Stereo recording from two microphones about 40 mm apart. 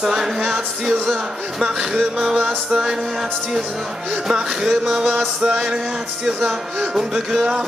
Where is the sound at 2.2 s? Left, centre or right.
Centre.